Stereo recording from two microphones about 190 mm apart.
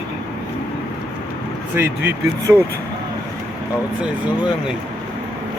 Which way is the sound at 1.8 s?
10° right (ahead or behind).